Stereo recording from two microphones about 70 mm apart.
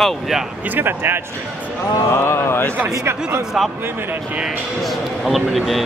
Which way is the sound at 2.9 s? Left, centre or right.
Right.